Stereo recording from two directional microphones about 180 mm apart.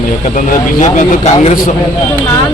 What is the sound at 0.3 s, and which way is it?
Speech, 45° left (ahead or behind).